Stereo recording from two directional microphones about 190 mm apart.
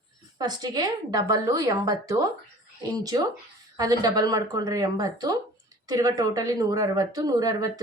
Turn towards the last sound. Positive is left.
turn(degrees=-20)  # may be behind; listen again after turning